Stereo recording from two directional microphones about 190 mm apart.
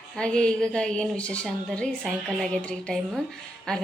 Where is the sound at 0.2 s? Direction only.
5° left (ahead or behind).